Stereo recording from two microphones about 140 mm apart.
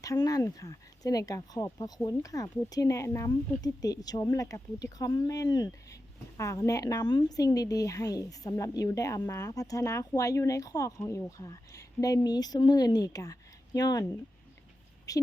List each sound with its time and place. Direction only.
0.0 s speech: 25° left (ahead or behind)
15.1 s a woman's voice: 25° left (ahead or behind)